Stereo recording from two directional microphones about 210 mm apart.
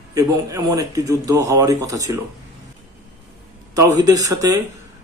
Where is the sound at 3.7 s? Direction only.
15° right (ahead or behind).